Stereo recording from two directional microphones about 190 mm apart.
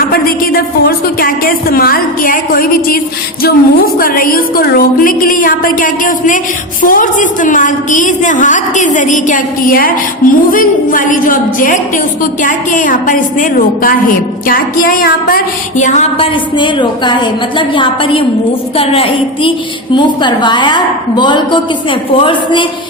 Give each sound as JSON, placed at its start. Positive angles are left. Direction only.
{"t": 0.1, "sound": "a woman's voice", "side_deg": 50}
{"t": 15.8, "sound": "a woman's voice", "side_deg": 40}